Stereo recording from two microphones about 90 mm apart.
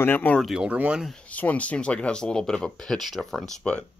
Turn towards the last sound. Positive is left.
turn(degrees=5)  # may be behind; listen again after turning